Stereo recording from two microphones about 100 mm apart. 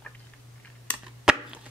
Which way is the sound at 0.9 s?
15° left (ahead or behind).